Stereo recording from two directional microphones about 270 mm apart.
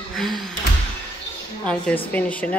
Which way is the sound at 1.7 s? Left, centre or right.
Centre.